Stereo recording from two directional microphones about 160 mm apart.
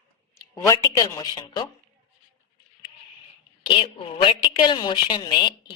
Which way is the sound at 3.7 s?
30° left (ahead or behind).